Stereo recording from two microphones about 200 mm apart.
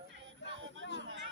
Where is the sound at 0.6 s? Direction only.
70° right (ahead or behind).